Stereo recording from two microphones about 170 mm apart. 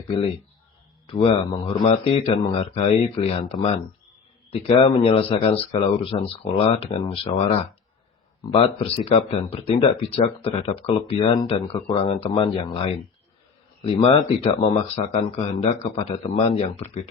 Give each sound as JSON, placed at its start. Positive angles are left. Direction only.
{"t": 1.0, "sound": "speech", "side_deg": 30}
{"t": 8.4, "sound": "speech", "side_deg": 35}